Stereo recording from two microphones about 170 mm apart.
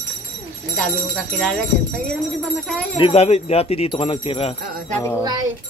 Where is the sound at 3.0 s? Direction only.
40° left (ahead or behind).